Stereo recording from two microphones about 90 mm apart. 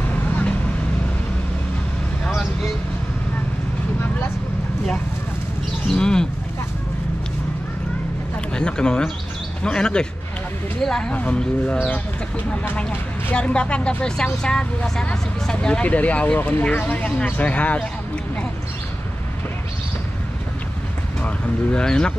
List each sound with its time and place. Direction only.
0.1 s vehicle: 15° left (ahead or behind)
5.9 s bird: 10° left (ahead or behind)
8.5 s a sound: 10° left (ahead or behind)
9.6 s speech: 10° left (ahead or behind)
13.3 s speech: 15° left (ahead or behind)
21.7 s speech: 10° left (ahead or behind)